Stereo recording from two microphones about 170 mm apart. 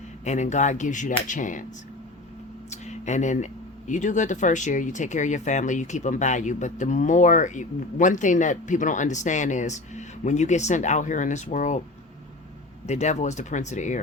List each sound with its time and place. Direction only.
0.3 s speech: 45° left (ahead or behind)
2.6 s speech: 40° left (ahead or behind)
12.8 s speech: 40° left (ahead or behind)